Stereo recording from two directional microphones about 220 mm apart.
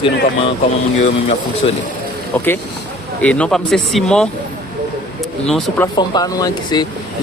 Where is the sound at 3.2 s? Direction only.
5° left (ahead or behind).